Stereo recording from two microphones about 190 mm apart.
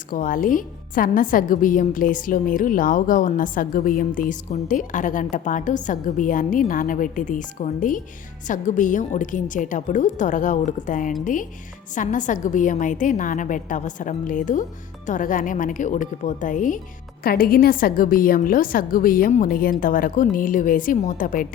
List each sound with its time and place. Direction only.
0.1 s a woman's voice: 45° left (ahead or behind)